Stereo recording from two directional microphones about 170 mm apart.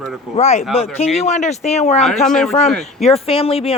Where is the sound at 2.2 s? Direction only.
5° left (ahead or behind).